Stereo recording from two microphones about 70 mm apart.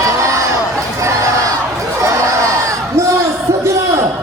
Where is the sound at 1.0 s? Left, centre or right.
Right.